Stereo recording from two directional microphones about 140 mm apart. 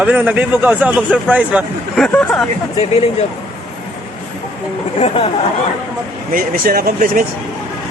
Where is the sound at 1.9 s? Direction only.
5° left (ahead or behind).